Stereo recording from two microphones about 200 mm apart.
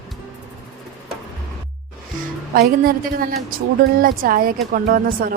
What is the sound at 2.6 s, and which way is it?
Speech, 45° right (ahead or behind).